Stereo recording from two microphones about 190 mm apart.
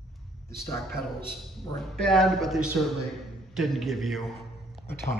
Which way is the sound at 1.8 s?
5° left (ahead or behind).